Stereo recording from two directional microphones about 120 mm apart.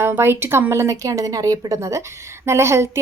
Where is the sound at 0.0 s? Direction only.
20° right (ahead or behind).